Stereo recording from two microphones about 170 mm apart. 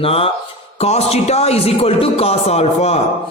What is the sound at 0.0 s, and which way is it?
Speech, 35° left (ahead or behind).